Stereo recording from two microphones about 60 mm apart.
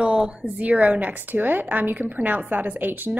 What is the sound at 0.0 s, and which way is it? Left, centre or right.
A woman's voice, centre.